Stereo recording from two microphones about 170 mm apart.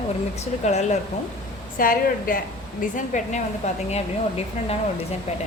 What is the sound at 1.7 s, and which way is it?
A woman's voice, 55° left (ahead or behind).